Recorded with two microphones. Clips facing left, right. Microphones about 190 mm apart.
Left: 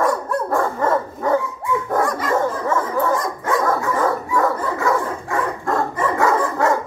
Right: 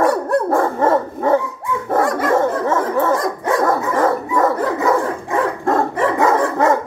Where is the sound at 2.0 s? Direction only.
75° right (ahead or behind).